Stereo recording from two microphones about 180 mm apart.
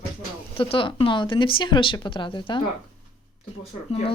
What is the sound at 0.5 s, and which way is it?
Speech, 30° left (ahead or behind).